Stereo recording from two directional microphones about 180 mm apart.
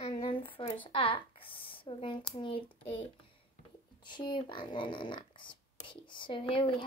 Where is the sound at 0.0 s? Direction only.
30° left (ahead or behind).